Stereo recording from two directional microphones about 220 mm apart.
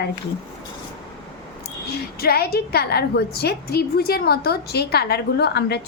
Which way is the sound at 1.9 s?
45° left (ahead or behind).